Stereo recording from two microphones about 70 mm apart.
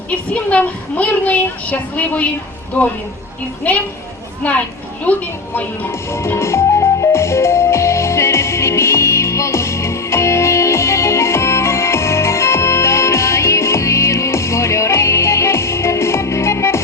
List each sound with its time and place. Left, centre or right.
0.5 s a child's voice: centre
4.4 s a child's voice: left
5.9 s music: left